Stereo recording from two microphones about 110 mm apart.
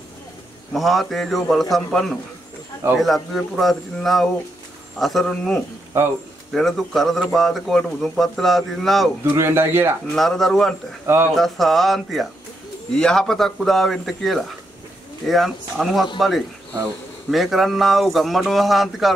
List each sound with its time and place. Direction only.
0.7 s speech: centre (ahead or behind)
9.3 s speech: 20° right (ahead or behind)
10.1 s speech: centre (ahead or behind)